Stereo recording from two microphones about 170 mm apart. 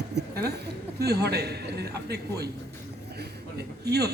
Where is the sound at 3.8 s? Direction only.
70° right (ahead or behind).